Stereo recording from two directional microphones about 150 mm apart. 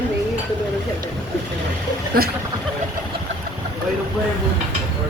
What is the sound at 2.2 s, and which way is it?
Speech, 80° right.